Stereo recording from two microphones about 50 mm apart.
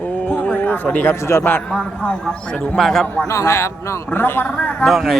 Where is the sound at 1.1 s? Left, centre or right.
Left.